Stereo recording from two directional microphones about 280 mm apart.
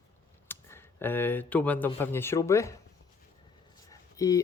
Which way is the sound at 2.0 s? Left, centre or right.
Centre.